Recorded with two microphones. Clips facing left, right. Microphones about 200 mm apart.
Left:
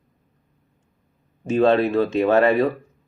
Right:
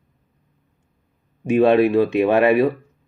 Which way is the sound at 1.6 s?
15° right (ahead or behind).